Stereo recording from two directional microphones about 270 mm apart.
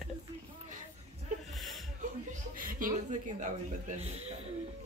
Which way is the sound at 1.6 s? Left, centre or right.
Centre.